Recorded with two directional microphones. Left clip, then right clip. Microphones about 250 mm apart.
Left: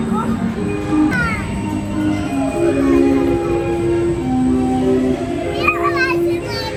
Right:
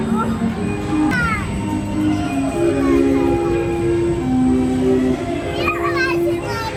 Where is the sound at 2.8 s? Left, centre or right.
Centre.